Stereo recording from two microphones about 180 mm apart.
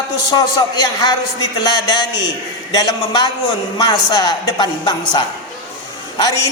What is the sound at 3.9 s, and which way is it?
A woman's voice, 25° left (ahead or behind).